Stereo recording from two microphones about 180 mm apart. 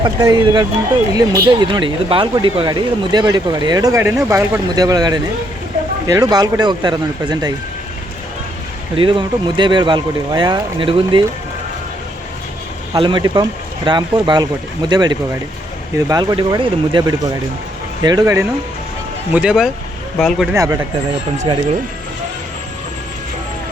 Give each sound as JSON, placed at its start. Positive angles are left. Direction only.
{"t": 0.0, "sound": "speech", "side_deg": -25}
{"t": 9.0, "sound": "speech", "side_deg": -25}
{"t": 13.0, "sound": "speech", "side_deg": -25}
{"t": 19.3, "sound": "speech", "side_deg": -5}
{"t": 20.5, "sound": "speech", "side_deg": -15}
{"t": 21.4, "sound": "speech", "side_deg": -30}